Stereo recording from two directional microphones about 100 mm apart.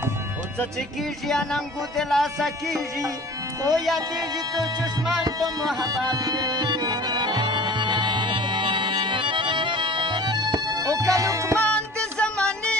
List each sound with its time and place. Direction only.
0.7 s speech: 5° left (ahead or behind)
5.8 s music: 40° right (ahead or behind)
11.6 s music: 10° left (ahead or behind)